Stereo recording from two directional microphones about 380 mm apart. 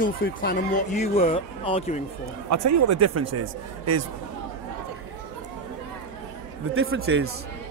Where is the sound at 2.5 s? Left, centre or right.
Right.